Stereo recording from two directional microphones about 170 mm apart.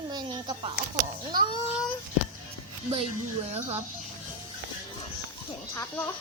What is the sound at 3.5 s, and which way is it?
Speech, 40° right (ahead or behind).